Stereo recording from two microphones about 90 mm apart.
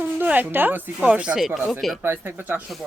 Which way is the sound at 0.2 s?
20° right (ahead or behind).